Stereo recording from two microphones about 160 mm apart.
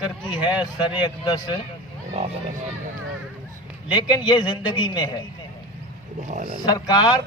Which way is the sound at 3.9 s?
30° left (ahead or behind).